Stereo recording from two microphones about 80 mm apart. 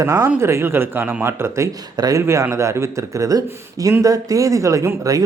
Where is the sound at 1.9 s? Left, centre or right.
Right.